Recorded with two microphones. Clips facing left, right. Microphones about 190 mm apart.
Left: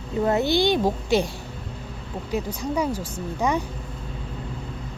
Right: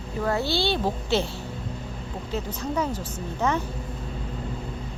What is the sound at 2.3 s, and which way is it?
Speech, 10° left (ahead or behind).